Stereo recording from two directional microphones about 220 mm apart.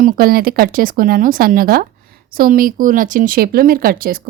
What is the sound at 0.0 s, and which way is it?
Speech, 40° right (ahead or behind).